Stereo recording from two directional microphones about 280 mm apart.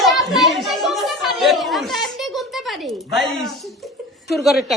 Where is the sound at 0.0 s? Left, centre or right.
Centre.